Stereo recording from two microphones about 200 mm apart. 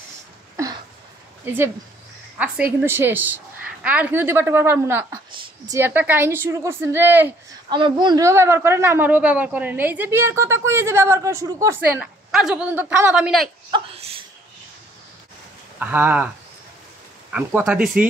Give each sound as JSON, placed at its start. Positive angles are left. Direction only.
{"t": 1.5, "sound": "a woman's voice", "side_deg": -10}
{"t": 7.7, "sound": "a woman's voice", "side_deg": -25}
{"t": 13.7, "sound": "a sound", "side_deg": -25}
{"t": 15.8, "sound": "a woman's voice", "side_deg": -10}
{"t": 17.3, "sound": "a woman's voice", "side_deg": -10}